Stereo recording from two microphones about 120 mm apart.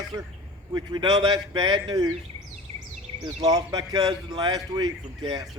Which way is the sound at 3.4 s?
30° right (ahead or behind).